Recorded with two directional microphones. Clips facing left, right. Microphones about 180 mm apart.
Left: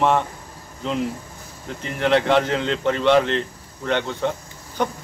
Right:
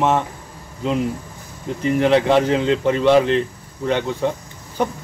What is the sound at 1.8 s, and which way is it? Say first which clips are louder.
A man's voice: right 4 dB; 10° right (ahead or behind).